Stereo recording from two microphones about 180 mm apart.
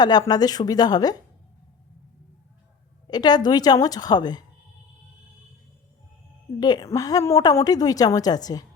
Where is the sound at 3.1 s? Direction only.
25° left (ahead or behind).